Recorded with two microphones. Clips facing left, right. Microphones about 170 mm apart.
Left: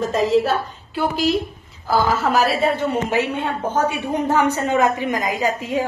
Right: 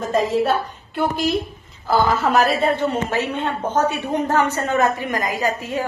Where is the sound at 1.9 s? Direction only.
Centre (ahead or behind).